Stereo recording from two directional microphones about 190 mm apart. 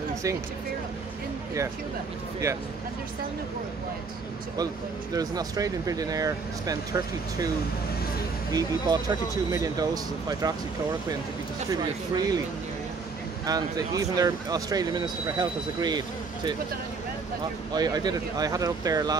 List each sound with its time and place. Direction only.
0.1 s a sound: 15° right (ahead or behind)
2.4 s speech: 10° right (ahead or behind)
5.1 s speech: 20° right (ahead or behind)
8.5 s speech: 20° right (ahead or behind)
11.7 s speech: 20° right (ahead or behind)
13.5 s speech: 20° right (ahead or behind)
17.7 s speech: 20° right (ahead or behind)